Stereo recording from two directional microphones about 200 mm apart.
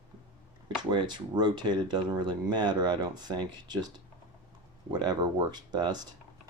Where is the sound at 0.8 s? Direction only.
20° right (ahead or behind).